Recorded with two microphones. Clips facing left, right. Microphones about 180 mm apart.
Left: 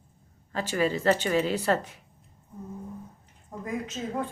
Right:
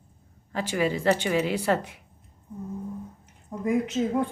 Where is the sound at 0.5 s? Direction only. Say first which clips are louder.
Right 1 dB; 10° right (ahead or behind).